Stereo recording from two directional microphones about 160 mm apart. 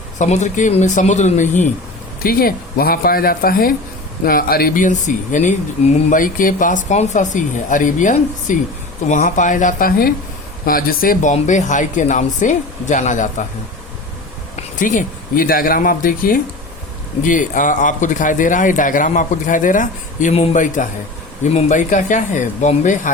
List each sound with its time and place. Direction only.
0.2 s speech: 50° left (ahead or behind)
2.2 s speech: 65° left (ahead or behind); by 13.4 s 50° left (ahead or behind)
14.8 s speech: 55° left (ahead or behind)
20.3 s speech: 45° left (ahead or behind)